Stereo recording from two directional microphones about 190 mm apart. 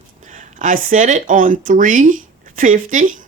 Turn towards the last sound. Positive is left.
turn(degrees=-45)  # may be behind; listen again after turning